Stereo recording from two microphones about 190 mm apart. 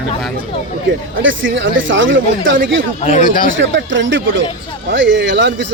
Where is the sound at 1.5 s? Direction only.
85° right.